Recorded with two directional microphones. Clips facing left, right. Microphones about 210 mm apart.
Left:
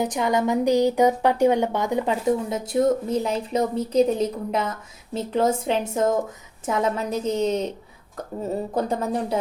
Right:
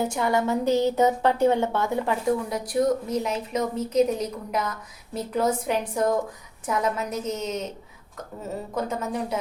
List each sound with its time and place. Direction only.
0.0 s a woman's voice: 20° left (ahead or behind)
8.7 s a woman's voice: 35° left (ahead or behind)